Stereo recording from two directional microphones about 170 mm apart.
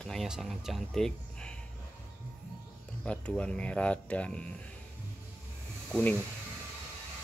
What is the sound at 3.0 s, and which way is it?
Speech, 5° left (ahead or behind).